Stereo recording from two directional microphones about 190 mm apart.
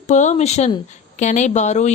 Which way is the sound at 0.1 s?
40° left (ahead or behind).